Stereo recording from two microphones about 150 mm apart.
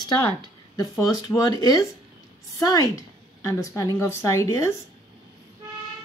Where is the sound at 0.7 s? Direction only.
25° left (ahead or behind).